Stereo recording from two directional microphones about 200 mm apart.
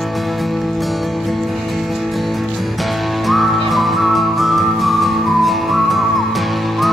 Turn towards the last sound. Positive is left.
turn(degrees=0)  # may be behind; listen again after turning